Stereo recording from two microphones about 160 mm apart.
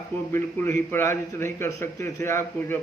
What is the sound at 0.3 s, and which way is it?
A man's voice, 15° left (ahead or behind).